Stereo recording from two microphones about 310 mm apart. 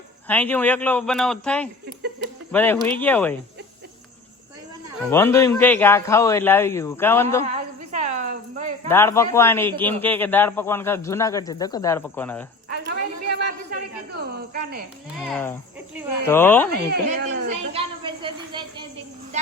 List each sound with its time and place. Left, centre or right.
0.3 s speech: centre
5.1 s speech: centre
7.4 s a sound: right
8.9 s speech: centre
12.7 s a sound: right
14.3 s speech: right
15.2 s speech: centre
16.9 s speech: right
17.7 s a sound: centre